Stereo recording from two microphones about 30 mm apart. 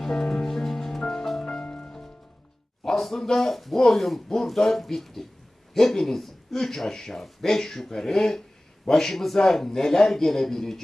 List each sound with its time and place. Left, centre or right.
0.0 s music: centre
1.4 s music: left
2.8 s a sound: centre
3.3 s speech: centre